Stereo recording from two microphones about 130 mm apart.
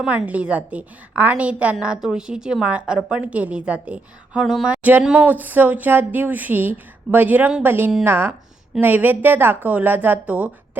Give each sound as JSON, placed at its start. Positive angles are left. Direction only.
{"t": 0.0, "sound": "a woman's voice", "side_deg": -5}